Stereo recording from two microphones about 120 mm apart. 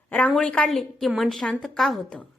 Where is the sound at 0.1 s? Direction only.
10° left (ahead or behind).